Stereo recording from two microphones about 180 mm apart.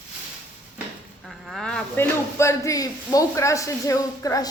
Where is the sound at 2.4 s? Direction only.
15° left (ahead or behind).